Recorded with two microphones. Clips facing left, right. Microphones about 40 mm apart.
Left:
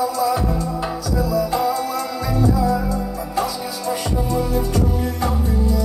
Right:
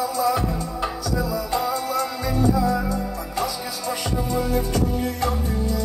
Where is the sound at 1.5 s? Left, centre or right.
Centre.